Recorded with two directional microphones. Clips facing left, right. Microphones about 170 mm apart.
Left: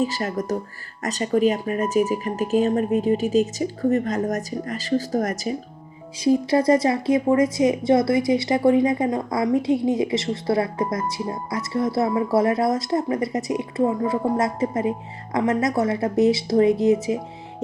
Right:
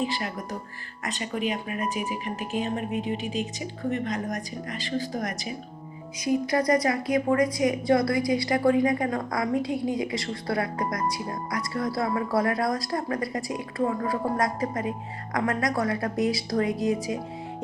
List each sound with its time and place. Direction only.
0.0 s speech: 40° left (ahead or behind)
6.1 s a woman's voice: 30° left (ahead or behind)